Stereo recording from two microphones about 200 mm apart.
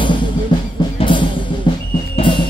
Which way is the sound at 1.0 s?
25° left (ahead or behind).